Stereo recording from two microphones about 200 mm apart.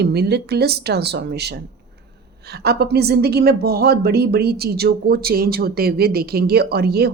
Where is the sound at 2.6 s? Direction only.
55° right (ahead or behind).